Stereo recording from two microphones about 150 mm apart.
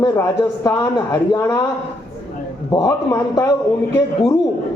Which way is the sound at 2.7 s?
25° left (ahead or behind).